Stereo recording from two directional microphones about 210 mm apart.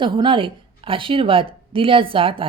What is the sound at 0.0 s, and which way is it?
Speech, 25° right (ahead or behind).